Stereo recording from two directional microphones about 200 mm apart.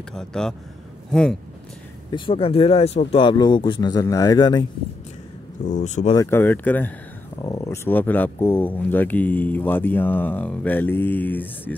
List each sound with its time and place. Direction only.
0.1 s speech: 5° left (ahead or behind)
2.0 s speech: 25° left (ahead or behind)
5.7 s speech: 35° left (ahead or behind)
6.1 s speech: 10° left (ahead or behind)